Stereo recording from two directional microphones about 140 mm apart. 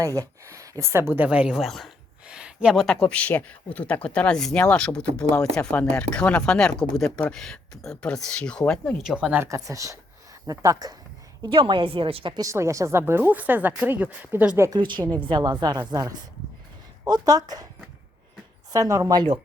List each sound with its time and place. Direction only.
0.0 s speech: 25° right (ahead or behind); by 9.0 s 10° left (ahead or behind)
9.0 s speech: 5° right (ahead or behind)
9.3 s speech: 20° right (ahead or behind)
11.5 s a woman's voice: 35° right (ahead or behind)
12.4 s speech: 20° right (ahead or behind)
14.7 s a woman's voice: 35° right (ahead or behind)
18.7 s speech: 25° right (ahead or behind)